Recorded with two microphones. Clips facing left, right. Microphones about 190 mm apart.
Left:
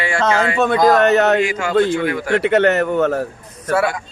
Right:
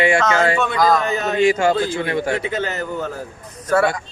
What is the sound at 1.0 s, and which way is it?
Speech, 70° left (ahead or behind).